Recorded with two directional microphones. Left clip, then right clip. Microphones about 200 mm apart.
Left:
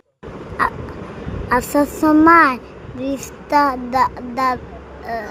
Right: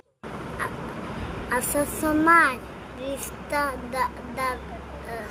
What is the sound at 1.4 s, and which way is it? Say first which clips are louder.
Speech: left 9 dB; 35° left (ahead or behind).